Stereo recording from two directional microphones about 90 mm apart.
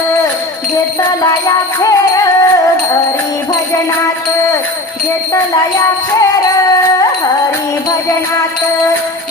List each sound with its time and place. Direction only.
1.8 s music: 40° left (ahead or behind)